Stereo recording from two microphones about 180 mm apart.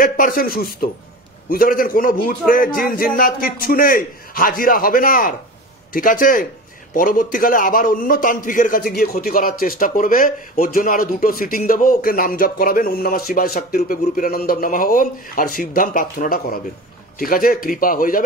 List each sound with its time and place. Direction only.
0.0 s a man's voice: 50° left (ahead or behind)